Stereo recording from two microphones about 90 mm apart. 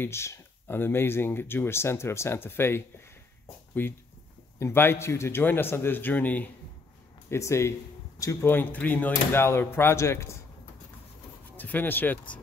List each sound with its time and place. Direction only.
0.0 s speech: 30° left (ahead or behind)
7.2 s speech: 30° left (ahead or behind); by 9.1 s 15° left (ahead or behind)
9.1 s speech: 25° left (ahead or behind)
11.5 s speech: 20° left (ahead or behind)